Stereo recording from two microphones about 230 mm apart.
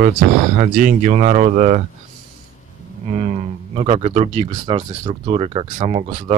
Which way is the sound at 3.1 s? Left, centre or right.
Right.